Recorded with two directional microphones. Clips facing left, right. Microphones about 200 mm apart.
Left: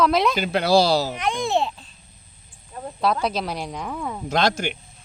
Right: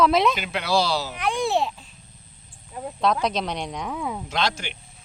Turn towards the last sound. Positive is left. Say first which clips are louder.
# left 5 dB
turn(degrees=45)  # may be behind; listen again after turning